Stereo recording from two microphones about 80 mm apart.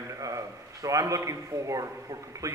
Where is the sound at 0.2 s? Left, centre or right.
Right.